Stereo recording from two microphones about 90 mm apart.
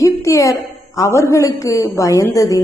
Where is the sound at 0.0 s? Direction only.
35° left (ahead or behind).